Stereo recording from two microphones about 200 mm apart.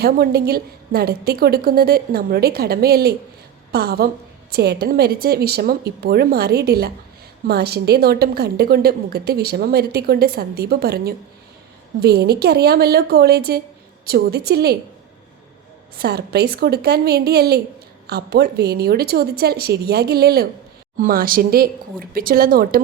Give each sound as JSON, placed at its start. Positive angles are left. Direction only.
{"t": 0.0, "sound": "a woman's voice", "side_deg": -50}
{"t": 16.0, "sound": "a woman's voice", "side_deg": -55}